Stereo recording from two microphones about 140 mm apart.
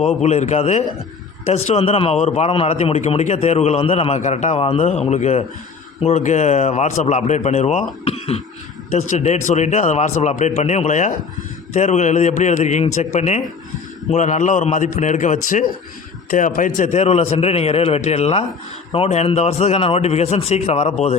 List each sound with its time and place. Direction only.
0.0 s a man's voice: 50° left (ahead or behind)